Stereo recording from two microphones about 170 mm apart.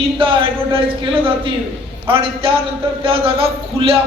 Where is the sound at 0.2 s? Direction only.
30° right (ahead or behind).